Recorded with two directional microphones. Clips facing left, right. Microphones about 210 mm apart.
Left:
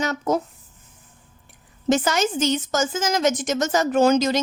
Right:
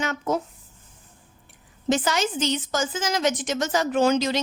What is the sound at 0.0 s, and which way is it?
Speech, 40° left (ahead or behind).